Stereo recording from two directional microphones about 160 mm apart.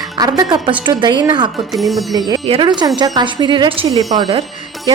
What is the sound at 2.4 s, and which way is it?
A woman's voice, 35° right (ahead or behind).